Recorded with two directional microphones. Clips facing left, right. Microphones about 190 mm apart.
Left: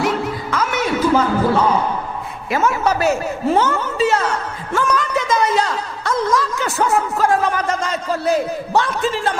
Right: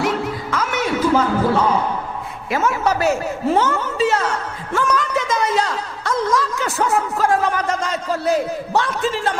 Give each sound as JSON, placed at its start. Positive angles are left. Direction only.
{"t": 0.0, "sound": "music", "side_deg": 15}
{"t": 1.5, "sound": "a sound", "side_deg": 25}
{"t": 2.5, "sound": "a man's voice", "side_deg": 25}
{"t": 3.6, "sound": "a sound", "side_deg": 15}
{"t": 6.3, "sound": "a man's voice", "side_deg": 15}
{"t": 6.7, "sound": "a man's voice", "side_deg": 25}